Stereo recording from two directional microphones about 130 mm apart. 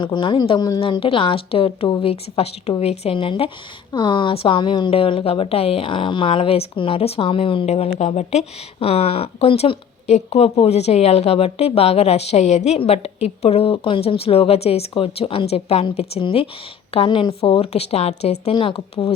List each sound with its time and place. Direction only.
0.0 s speech: 35° left (ahead or behind)
7.9 s speech: 60° left (ahead or behind)
18.5 s speech: 40° left (ahead or behind)